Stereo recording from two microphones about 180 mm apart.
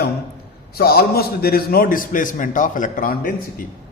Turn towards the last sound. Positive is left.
turn(degrees=50)  # may be behind; listen again after turning